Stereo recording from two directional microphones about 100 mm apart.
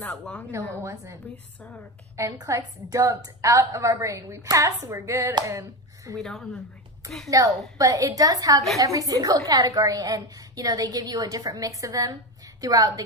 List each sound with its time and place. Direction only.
0.0 s a woman's voice: 15° left (ahead or behind)
0.8 s a woman's voice: 30° right (ahead or behind)
6.1 s speech: centre (ahead or behind)
7.3 s a woman's voice: 35° right (ahead or behind)